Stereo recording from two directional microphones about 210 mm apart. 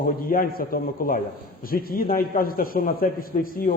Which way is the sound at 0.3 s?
45° left (ahead or behind).